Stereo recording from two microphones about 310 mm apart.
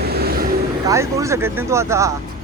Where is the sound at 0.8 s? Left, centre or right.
Centre.